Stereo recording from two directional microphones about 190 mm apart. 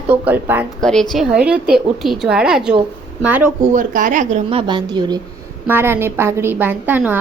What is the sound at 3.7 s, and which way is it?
A woman's voice, 45° right (ahead or behind).